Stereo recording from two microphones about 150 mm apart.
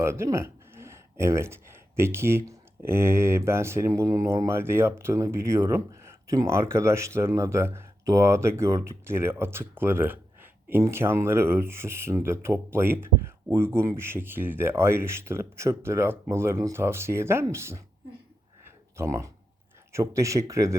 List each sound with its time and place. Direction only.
0.0 s speech: 20° right (ahead or behind)
18.9 s speech: 20° right (ahead or behind)